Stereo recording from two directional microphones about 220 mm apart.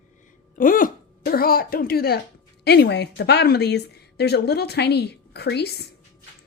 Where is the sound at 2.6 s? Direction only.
50° left (ahead or behind).